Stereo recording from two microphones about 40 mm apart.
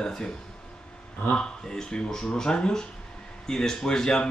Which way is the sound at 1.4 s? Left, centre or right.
Centre.